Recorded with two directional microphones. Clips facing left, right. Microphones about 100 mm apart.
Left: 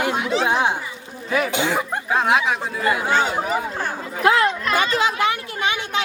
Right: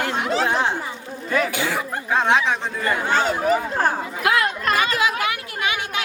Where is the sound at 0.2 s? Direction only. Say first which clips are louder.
Even; 40° right (ahead or behind).